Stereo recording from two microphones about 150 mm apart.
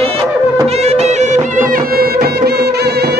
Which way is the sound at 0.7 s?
45° right (ahead or behind).